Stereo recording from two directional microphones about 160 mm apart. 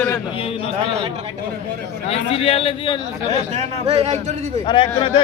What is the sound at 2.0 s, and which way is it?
Speech, 40° left (ahead or behind).